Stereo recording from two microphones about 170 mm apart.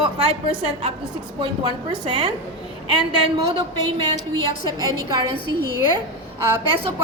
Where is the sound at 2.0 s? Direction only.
30° right (ahead or behind).